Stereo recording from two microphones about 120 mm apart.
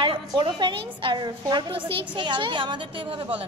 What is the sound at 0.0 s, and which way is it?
A woman's voice, 40° right (ahead or behind).